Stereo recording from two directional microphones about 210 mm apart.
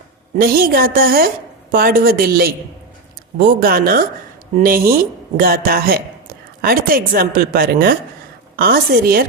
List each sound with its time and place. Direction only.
0.3 s speech: 45° right (ahead or behind)